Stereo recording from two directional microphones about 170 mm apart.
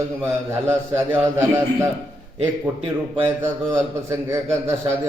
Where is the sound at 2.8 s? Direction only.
30° right (ahead or behind).